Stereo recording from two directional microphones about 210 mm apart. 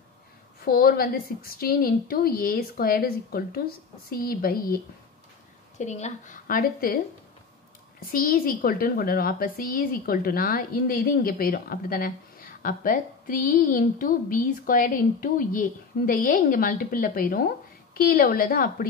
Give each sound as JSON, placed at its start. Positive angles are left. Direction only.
{"t": 0.7, "sound": "a woman's voice", "side_deg": 45}
{"t": 5.8, "sound": "a woman's voice", "side_deg": 35}
{"t": 8.0, "sound": "a woman's voice", "side_deg": 40}